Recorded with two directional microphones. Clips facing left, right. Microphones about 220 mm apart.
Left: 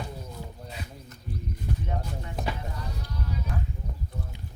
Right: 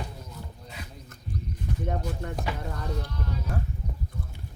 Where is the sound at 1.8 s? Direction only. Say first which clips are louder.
Right 4 dB; 55° right (ahead or behind).